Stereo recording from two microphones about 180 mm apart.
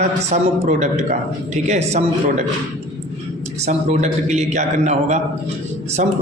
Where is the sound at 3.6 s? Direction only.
40° right (ahead or behind).